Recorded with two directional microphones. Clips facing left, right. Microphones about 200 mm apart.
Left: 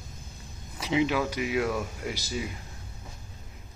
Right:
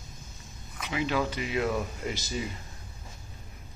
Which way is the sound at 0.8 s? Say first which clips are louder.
Left 6 dB; 25° left (ahead or behind).